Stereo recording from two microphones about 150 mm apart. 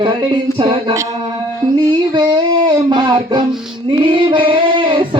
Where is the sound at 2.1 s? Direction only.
30° right (ahead or behind).